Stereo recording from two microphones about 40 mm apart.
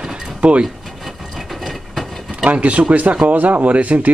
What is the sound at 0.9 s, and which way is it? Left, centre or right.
Wood, centre.